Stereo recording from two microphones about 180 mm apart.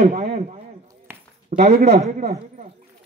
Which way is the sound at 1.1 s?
10° right (ahead or behind).